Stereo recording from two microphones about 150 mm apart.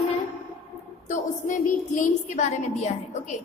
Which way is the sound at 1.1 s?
55° left (ahead or behind).